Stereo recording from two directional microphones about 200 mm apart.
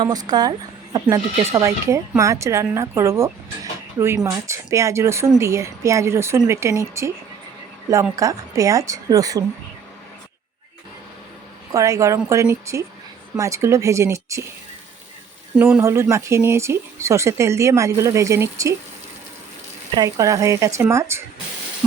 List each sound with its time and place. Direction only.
0.0 s speech: 20° right (ahead or behind)
8.1 s speech: 15° right (ahead or behind)
11.7 s speech: 15° right (ahead or behind)
15.5 s speech: 10° right (ahead or behind)
20.0 s speech: 15° right (ahead or behind)